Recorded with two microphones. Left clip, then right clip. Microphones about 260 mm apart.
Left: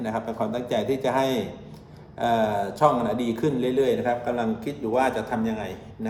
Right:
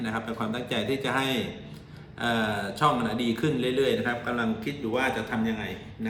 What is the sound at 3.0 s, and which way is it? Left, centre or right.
Speech, centre.